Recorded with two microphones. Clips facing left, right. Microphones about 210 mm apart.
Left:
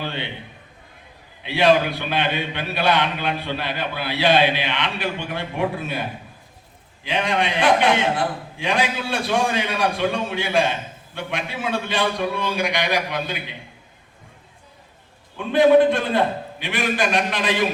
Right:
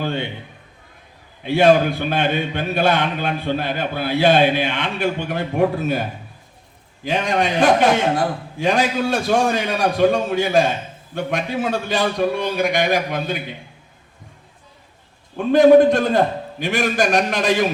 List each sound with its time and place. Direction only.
0.0 s a man's voice: 45° right (ahead or behind)
1.4 s a man's voice: 45° right (ahead or behind)
15.4 s a man's voice: 45° right (ahead or behind)